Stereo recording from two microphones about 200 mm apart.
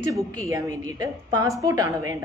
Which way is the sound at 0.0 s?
15° right (ahead or behind).